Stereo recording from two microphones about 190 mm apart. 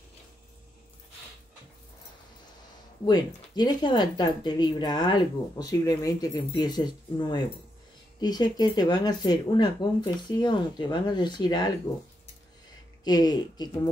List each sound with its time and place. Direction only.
3.1 s a woman's voice: 20° left (ahead or behind)
13.0 s a woman's voice: 20° left (ahead or behind)